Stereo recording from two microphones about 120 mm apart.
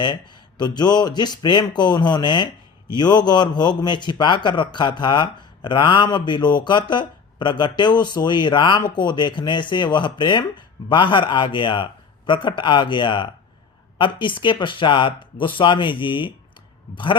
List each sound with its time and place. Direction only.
0.6 s a man's voice: 35° left (ahead or behind)